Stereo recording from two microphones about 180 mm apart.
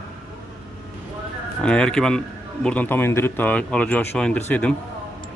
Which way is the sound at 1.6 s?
5° left (ahead or behind).